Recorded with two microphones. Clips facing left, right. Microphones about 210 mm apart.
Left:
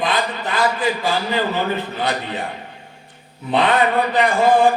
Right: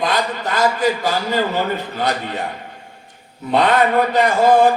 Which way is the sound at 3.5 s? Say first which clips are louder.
Right 2 dB; 40° right (ahead or behind).